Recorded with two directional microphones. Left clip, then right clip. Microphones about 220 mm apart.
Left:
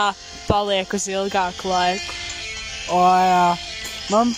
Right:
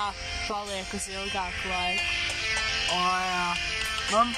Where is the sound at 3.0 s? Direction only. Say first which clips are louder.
Left 12 dB; 35° left (ahead or behind).